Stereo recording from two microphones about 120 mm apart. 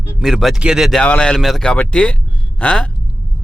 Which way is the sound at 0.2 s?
Centre (ahead or behind).